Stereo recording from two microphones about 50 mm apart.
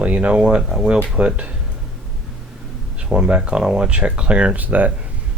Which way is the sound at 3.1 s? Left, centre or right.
Right.